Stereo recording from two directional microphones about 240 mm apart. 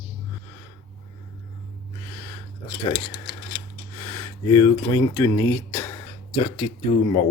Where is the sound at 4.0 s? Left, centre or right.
Centre.